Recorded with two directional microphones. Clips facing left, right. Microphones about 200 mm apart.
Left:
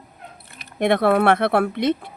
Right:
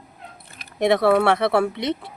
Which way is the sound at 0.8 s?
55° left (ahead or behind).